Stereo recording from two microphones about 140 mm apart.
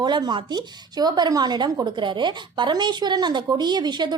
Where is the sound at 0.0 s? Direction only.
30° right (ahead or behind).